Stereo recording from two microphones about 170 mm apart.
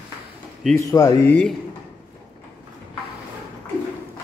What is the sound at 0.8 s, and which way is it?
Speech, 20° left (ahead or behind).